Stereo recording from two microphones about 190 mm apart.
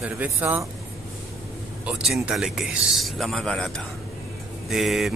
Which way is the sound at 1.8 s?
5° right (ahead or behind).